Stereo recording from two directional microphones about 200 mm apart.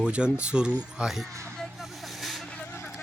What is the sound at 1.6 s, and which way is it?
Vehicle, centre (ahead or behind).